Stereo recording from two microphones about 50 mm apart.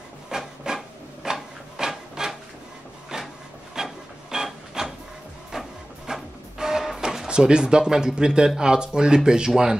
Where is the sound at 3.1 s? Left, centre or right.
Centre.